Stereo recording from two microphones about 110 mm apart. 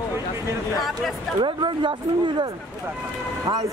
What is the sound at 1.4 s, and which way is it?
Speech, 50° right (ahead or behind).